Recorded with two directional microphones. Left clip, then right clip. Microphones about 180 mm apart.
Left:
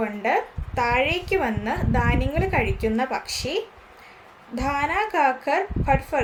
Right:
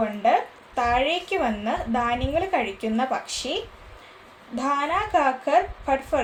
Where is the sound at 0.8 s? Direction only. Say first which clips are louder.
Even; 15° left (ahead or behind).